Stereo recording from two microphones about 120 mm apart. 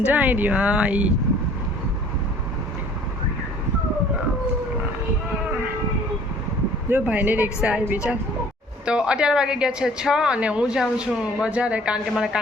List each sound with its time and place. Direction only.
0.0 s a woman's voice: 15° right (ahead or behind)
6.9 s a woman's voice: 10° right (ahead or behind)